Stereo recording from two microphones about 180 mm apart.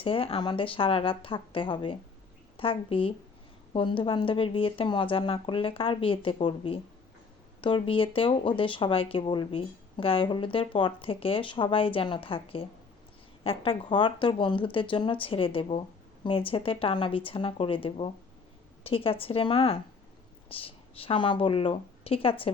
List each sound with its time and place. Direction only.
0.0 s a woman's voice: 30° left (ahead or behind)